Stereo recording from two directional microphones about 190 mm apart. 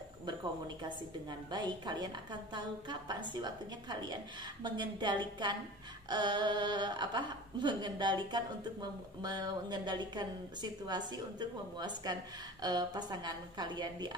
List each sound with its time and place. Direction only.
1.5 s a woman's voice: 25° right (ahead or behind)